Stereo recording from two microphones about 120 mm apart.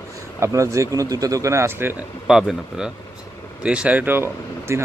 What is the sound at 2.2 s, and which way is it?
Speech, 5° right (ahead or behind).